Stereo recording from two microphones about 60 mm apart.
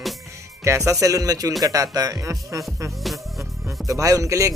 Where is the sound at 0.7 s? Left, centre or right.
Right.